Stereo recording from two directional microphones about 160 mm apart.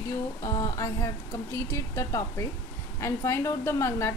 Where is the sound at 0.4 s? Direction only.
20° left (ahead or behind).